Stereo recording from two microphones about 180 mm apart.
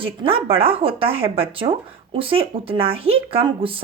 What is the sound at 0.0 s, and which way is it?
Speech, 30° right (ahead or behind).